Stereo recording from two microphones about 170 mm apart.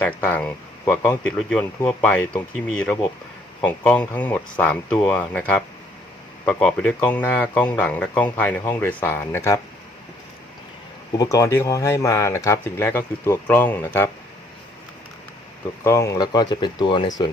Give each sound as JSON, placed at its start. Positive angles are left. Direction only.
{"t": 0.0, "sound": "speech", "side_deg": 10}
{"t": 11.1, "sound": "speech", "side_deg": 20}
{"t": 15.8, "sound": "speech", "side_deg": 15}